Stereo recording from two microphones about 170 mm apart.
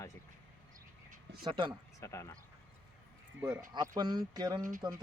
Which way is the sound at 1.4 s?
30° right (ahead or behind).